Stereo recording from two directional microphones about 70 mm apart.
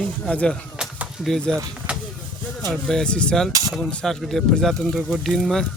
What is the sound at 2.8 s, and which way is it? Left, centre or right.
Speech, centre.